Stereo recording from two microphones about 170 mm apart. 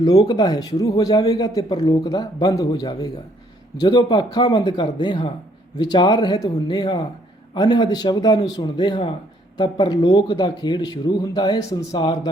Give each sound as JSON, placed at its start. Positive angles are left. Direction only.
{"t": 0.0, "sound": "a man's voice", "side_deg": 20}